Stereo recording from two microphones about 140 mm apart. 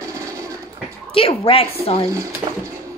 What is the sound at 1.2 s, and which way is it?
Speech, 40° left (ahead or behind).